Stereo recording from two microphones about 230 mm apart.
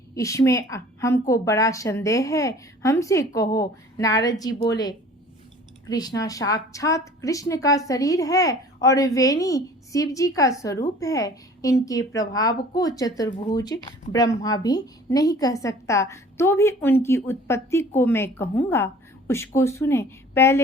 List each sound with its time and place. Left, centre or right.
0.2 s a woman's voice: centre